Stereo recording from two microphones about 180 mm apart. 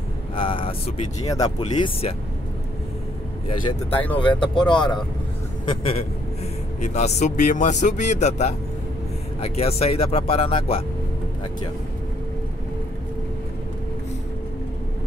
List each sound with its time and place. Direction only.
0.4 s vehicle: 30° left (ahead or behind)
1.6 s speech: 35° left (ahead or behind)
3.4 s speech: 30° left (ahead or behind)
3.9 s speech: 10° left (ahead or behind)
4.2 s speech: 25° left (ahead or behind)
6.8 s speech: 40° left (ahead or behind)